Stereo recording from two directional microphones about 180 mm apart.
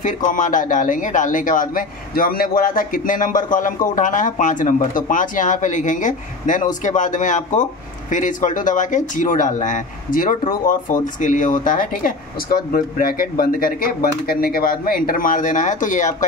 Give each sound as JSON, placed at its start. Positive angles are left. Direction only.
{"t": 0.0, "sound": "a man's voice", "side_deg": 45}